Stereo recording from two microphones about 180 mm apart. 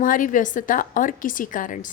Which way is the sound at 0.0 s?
50° left (ahead or behind).